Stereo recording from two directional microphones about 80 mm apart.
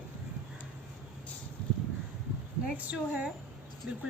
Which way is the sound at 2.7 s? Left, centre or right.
Centre.